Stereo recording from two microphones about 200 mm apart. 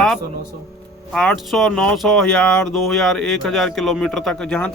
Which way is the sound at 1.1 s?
5° left (ahead or behind).